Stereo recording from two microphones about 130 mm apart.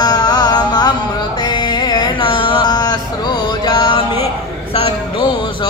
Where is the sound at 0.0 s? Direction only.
30° left (ahead or behind).